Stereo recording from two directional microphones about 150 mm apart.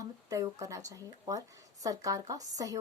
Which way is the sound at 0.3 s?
25° right (ahead or behind).